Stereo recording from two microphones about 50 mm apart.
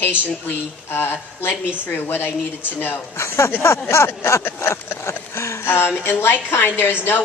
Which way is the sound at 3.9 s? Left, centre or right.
Left.